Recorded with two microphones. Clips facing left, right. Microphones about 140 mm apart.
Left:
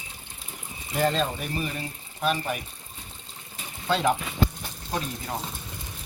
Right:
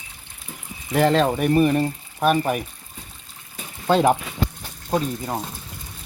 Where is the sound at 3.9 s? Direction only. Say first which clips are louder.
Right 7 dB; 50° right (ahead or behind).